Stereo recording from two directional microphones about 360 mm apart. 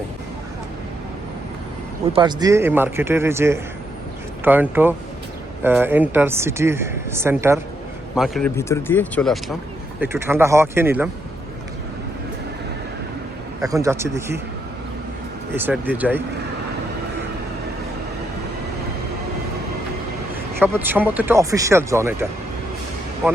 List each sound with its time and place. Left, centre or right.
2.1 s speech: centre
13.6 s speech: centre
15.5 s speech: centre
20.6 s speech: centre